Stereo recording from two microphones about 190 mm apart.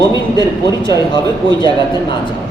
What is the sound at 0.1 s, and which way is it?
Speech, 20° left (ahead or behind).